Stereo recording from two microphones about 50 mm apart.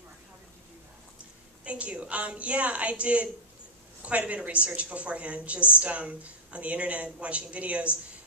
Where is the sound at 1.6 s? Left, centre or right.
Right.